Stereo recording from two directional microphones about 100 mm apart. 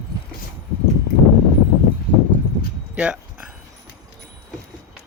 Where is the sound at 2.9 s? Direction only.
15° right (ahead or behind).